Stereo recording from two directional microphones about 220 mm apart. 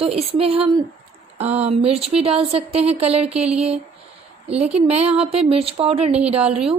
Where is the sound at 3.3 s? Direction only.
5° right (ahead or behind).